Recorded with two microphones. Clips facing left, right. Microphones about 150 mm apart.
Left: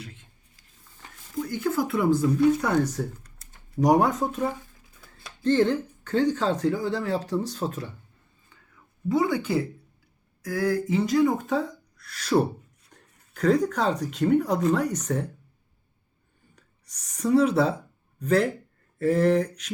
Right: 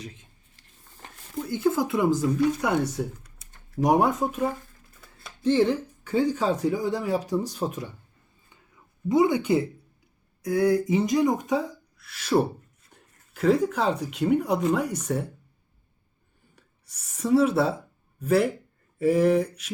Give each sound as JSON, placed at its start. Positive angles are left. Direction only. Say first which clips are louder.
{"t": 1.5, "sound": "speech", "louder": "right 2 dB", "side_deg": -20}
{"t": 2.6, "sound": "speech", "louder": "left 1 dB", "side_deg": -10}
{"t": 8.4, "sound": "a sound", "louder": "even", "side_deg": -20}
{"t": 10.4, "sound": "speech", "louder": "right 4 dB", "side_deg": -25}
{"t": 16.6, "sound": "gasp", "louder": "even", "side_deg": -5}
{"t": 18.2, "sound": "speech", "louder": "right 1 dB", "side_deg": -10}